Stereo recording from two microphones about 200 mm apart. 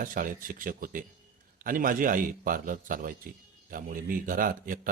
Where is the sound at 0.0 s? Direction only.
45° right (ahead or behind).